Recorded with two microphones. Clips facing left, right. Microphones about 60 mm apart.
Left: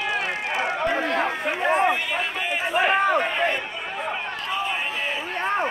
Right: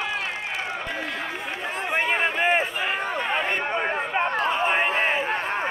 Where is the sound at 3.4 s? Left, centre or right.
Right.